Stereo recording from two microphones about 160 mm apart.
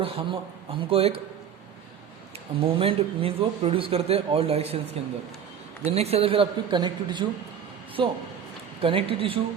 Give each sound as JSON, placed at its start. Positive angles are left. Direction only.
{"t": 0.0, "sound": "speech", "side_deg": -35}
{"t": 2.6, "sound": "speech", "side_deg": -35}
{"t": 5.8, "sound": "speech", "side_deg": -40}